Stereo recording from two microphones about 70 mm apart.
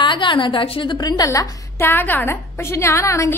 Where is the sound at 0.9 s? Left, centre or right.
Left.